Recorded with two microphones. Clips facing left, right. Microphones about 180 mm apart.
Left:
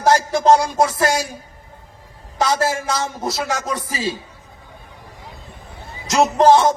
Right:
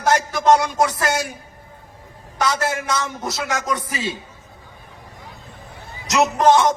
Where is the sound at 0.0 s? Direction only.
25° left (ahead or behind).